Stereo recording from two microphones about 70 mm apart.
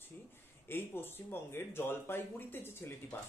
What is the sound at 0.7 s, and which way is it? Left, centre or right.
Speech, left.